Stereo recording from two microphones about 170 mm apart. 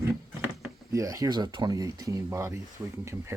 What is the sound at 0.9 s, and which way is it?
Speech, 20° right (ahead or behind).